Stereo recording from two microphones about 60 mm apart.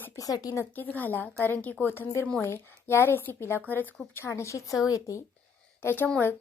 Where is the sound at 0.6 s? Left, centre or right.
Left.